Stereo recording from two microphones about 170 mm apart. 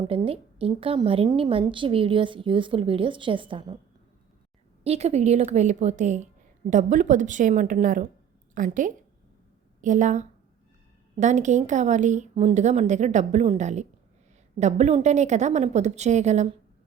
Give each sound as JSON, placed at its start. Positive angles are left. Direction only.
{"t": 0.1, "sound": "a woman's voice", "side_deg": -35}
{"t": 4.8, "sound": "a woman's voice", "side_deg": -40}